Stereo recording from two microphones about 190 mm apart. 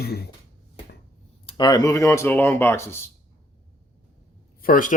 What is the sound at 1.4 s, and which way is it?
Speech, 25° left (ahead or behind).